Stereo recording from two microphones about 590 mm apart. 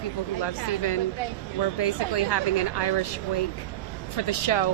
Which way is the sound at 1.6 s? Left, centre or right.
Left.